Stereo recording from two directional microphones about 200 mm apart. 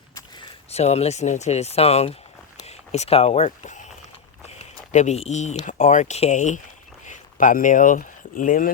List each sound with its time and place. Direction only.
0.3 s speech: 30° left (ahead or behind)